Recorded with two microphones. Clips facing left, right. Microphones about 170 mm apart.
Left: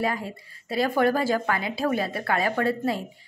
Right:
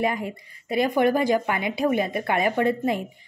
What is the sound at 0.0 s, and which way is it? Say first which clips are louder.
A woman's voice: right 2 dB; 20° right (ahead or behind).